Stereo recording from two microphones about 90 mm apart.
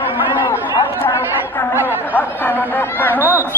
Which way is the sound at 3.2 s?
20° right (ahead or behind).